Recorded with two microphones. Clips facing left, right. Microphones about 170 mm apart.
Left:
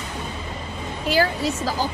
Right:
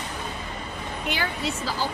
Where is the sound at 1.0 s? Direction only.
35° left (ahead or behind).